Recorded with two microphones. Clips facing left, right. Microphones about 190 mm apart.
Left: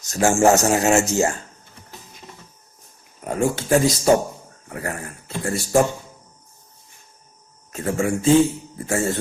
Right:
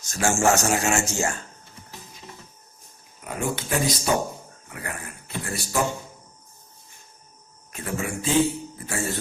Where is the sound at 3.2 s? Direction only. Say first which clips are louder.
Left 7 dB; 45° left (ahead or behind).